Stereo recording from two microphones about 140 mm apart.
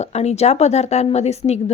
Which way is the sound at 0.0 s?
50° left (ahead or behind).